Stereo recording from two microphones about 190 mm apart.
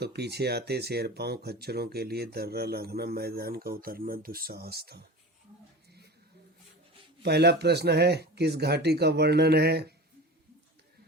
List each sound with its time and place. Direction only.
0.0 s speech: 60° right (ahead or behind)
7.2 s speech: 60° right (ahead or behind)